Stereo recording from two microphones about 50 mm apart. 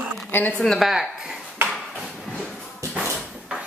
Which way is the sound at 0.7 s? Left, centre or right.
Centre.